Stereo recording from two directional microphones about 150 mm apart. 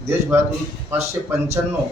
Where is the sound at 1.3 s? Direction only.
15° right (ahead or behind).